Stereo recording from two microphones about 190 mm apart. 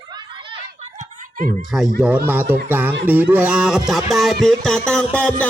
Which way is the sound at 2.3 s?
10° right (ahead or behind).